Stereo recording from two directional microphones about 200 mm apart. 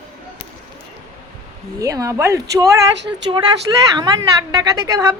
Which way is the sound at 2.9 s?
60° right (ahead or behind).